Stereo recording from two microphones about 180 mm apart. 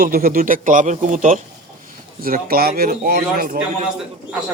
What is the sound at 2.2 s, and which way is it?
Speech, 55° right (ahead or behind).